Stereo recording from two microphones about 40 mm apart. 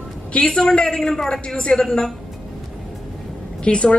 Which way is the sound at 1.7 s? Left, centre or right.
Centre.